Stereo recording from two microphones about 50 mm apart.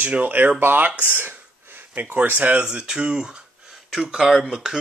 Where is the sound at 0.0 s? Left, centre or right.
Right.